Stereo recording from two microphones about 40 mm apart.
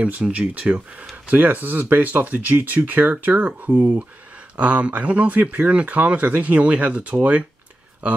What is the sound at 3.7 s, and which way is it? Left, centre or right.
Speech, right.